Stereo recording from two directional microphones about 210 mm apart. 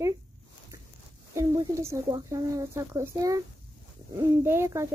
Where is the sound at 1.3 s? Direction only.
15° right (ahead or behind).